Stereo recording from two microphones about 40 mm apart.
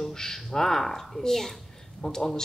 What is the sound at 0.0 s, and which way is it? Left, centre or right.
Speech, centre.